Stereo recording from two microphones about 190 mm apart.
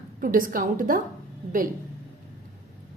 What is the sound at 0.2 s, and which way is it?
Speech, 45° right (ahead or behind).